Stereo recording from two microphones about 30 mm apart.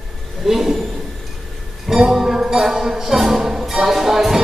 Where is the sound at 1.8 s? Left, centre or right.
Centre.